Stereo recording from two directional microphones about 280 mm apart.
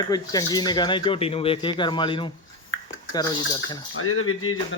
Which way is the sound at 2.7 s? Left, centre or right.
Left.